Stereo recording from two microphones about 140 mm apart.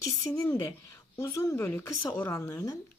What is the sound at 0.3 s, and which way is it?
A woman's voice, 20° left (ahead or behind).